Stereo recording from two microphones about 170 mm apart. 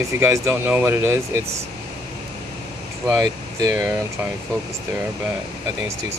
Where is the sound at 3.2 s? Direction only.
20° right (ahead or behind).